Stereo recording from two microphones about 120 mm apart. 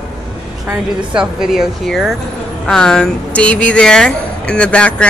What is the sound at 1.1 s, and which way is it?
Speech, 5° right (ahead or behind).